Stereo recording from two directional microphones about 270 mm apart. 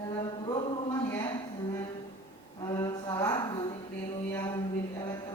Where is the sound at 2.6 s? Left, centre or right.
Centre.